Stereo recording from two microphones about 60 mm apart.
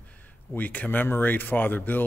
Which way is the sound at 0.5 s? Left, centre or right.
Left.